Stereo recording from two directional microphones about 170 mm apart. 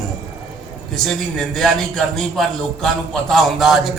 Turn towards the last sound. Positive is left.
turn(degrees=0)  # may be behind; listen again after turning